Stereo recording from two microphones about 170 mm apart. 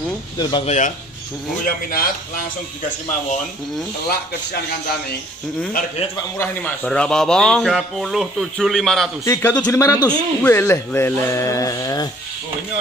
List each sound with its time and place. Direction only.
0.4 s speech: 25° left (ahead or behind)
0.7 s speech: 45° left (ahead or behind)
6.3 s speech: 10° left (ahead or behind)
9.2 s speech: 15° left (ahead or behind)